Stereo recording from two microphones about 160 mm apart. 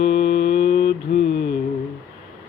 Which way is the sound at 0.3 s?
90° left.